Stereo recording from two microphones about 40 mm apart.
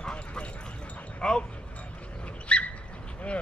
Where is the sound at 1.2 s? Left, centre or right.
Centre.